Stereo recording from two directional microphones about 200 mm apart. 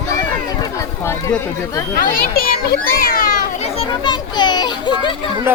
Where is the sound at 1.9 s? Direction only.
45° left (ahead or behind); by 5.1 s 20° left (ahead or behind).